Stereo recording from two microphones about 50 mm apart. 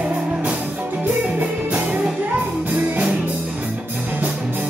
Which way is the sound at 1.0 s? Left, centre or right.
Right.